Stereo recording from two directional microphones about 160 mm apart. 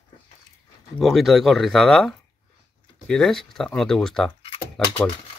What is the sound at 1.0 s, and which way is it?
Speech, centre (ahead or behind).